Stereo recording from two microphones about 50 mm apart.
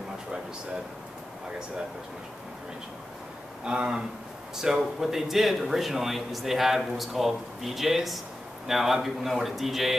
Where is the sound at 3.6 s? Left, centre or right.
Centre.